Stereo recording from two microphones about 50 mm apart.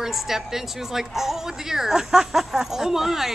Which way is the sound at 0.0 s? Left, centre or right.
Centre.